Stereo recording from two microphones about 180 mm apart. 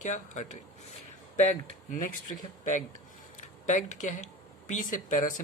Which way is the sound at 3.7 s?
45° left (ahead or behind).